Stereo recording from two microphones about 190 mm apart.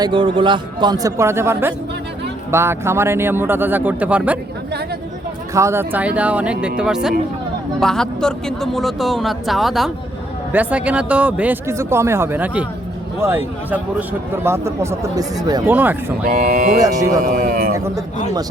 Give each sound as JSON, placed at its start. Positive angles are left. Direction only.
{"t": 0.0, "sound": "a man's voice", "side_deg": -25}
{"t": 5.5, "sound": "a man's voice", "side_deg": -15}
{"t": 16.2, "sound": "speech", "side_deg": -45}
{"t": 17.7, "sound": "a man's voice", "side_deg": -15}